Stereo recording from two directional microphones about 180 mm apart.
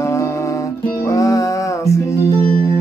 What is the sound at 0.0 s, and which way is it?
Music, 15° left (ahead or behind).